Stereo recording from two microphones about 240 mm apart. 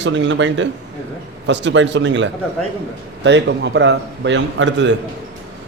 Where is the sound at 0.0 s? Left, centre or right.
Right.